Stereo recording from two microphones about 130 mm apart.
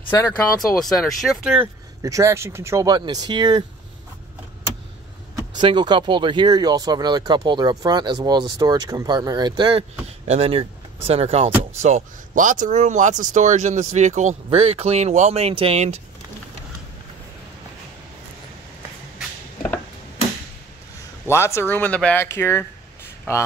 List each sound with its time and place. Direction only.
0.7 s speech: centre (ahead or behind)
2.0 s speech: 25° right (ahead or behind)
5.6 s speech: 35° right (ahead or behind)
10.2 s speech: 55° right (ahead or behind)
11.8 s speech: 75° right (ahead or behind)
14.5 s speech: 50° right (ahead or behind)
21.3 s speech: 20° left (ahead or behind)